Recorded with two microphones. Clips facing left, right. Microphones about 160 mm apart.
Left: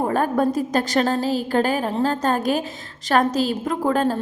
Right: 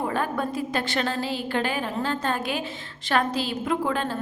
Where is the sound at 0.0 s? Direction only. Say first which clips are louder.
Left 7 dB; 45° left (ahead or behind).